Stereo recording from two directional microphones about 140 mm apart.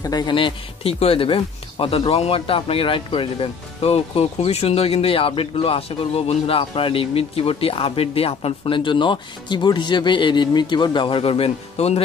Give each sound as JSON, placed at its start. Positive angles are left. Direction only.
{"t": 0.0, "sound": "speech", "side_deg": 30}